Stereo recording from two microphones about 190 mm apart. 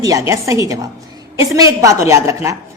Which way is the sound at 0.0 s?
15° right (ahead or behind).